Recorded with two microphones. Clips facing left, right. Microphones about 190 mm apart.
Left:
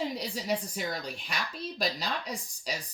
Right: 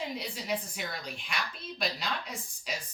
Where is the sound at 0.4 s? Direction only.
40° left (ahead or behind).